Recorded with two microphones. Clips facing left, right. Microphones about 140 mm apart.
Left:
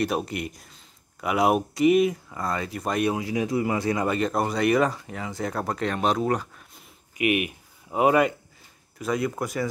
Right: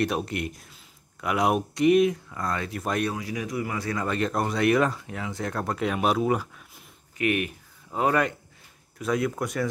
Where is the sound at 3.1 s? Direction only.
25° left (ahead or behind).